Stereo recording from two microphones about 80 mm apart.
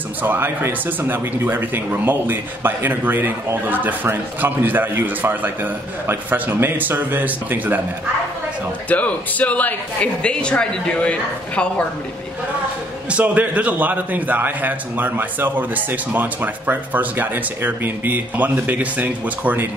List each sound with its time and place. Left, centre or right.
0.2 s speech: right
8.8 s a man's voice: centre
13.1 s speech: centre